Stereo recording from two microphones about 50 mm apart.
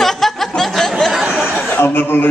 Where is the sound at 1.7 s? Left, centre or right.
Left.